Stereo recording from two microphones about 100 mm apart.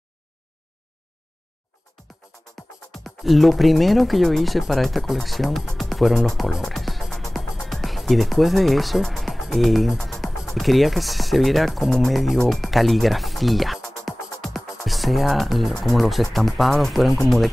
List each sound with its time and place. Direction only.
2.1 s music: centre (ahead or behind)
2.9 s speech: centre (ahead or behind)